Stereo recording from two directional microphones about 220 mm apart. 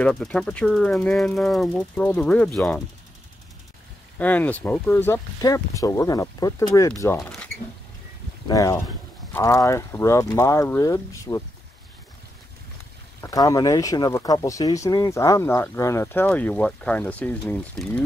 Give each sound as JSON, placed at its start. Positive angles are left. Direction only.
{"t": 0.0, "sound": "speech", "side_deg": 5}
{"t": 4.2, "sound": "speech", "side_deg": 5}
{"t": 7.2, "sound": "speech", "side_deg": 5}
{"t": 8.5, "sound": "speech", "side_deg": 15}
{"t": 13.2, "sound": "speech", "side_deg": 15}